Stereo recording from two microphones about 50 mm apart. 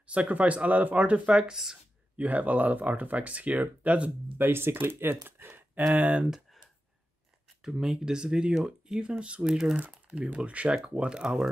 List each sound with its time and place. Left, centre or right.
0.0 s speech: right
2.1 s speech: right
4.4 s speech: right
5.9 s speech: right
6.3 s a sound: centre
7.8 s speech: centre